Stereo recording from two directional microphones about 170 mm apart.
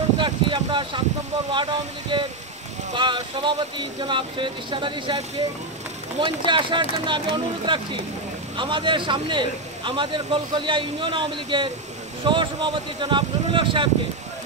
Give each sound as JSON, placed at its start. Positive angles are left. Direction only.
{"t": 0.2, "sound": "speech", "side_deg": -30}
{"t": 6.2, "sound": "speech", "side_deg": -30}